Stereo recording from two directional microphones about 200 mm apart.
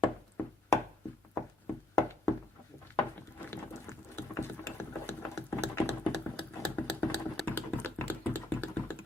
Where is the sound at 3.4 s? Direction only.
10° left (ahead or behind).